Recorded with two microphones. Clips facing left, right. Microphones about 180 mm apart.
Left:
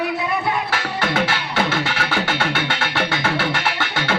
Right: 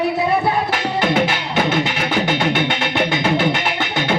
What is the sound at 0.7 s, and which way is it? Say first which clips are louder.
Music: right 4 dB; 20° right (ahead or behind).